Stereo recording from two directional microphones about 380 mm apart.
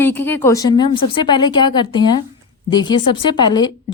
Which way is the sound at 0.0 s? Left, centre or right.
Centre.